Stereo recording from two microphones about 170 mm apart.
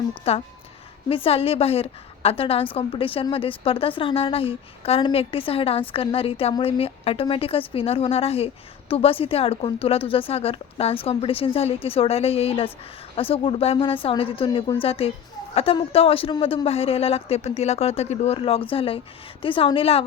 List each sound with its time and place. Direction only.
0.1 s a woman's voice: 35° left (ahead or behind)